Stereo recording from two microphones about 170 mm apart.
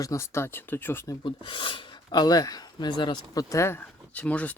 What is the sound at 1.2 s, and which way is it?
Speech, 30° left (ahead or behind).